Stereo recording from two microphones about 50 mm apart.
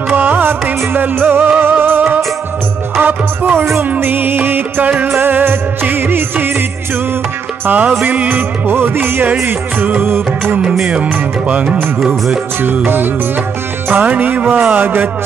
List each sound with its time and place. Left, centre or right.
0.1 s music: right
4.8 s speech: right
5.1 s music: right
7.6 s speech: right
8.1 s music: right
11.4 s music: right
12.7 s speech: right